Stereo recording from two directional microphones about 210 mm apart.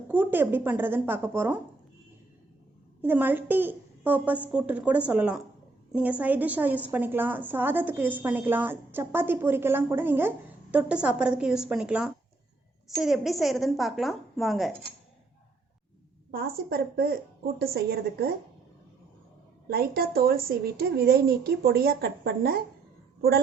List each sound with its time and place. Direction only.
0.1 s a woman's voice: 10° right (ahead or behind)
3.0 s a woman's voice: 10° right (ahead or behind)
16.3 s a woman's voice: 45° right (ahead or behind)
19.6 s a woman's voice: 50° right (ahead or behind)